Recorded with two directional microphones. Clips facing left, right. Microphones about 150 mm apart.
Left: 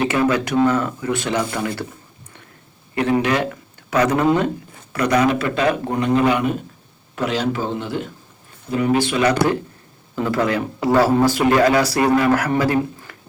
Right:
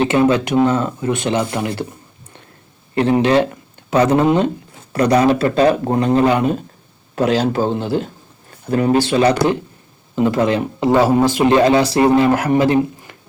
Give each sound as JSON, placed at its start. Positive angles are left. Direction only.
{"t": 0.0, "sound": "speech", "side_deg": -25}
{"t": 2.9, "sound": "speech", "side_deg": -30}